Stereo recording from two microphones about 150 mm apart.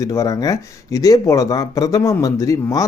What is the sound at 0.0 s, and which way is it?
Speech, 20° left (ahead or behind).